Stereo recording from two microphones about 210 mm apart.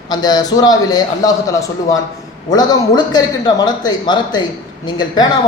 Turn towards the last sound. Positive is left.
turn(degrees=20)  # may be behind; listen again after turning